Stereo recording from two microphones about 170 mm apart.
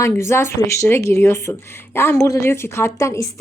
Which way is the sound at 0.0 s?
15° left (ahead or behind).